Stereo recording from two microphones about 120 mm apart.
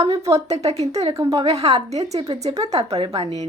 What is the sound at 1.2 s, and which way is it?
Speech, 30° right (ahead or behind).